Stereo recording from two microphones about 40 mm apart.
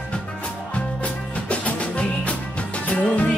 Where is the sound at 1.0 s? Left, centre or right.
Left.